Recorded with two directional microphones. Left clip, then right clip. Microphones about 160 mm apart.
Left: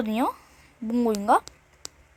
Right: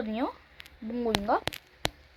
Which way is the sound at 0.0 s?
55° left (ahead or behind).